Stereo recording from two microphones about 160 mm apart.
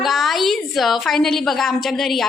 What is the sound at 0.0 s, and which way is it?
A woman's voice, centre (ahead or behind).